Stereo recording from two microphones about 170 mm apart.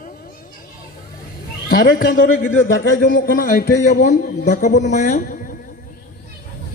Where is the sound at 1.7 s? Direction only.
60° left (ahead or behind).